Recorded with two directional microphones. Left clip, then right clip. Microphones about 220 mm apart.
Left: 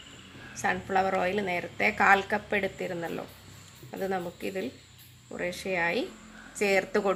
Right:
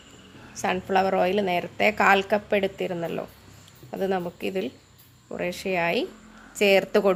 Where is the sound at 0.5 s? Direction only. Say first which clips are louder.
Right 4 dB; 40° right (ahead or behind).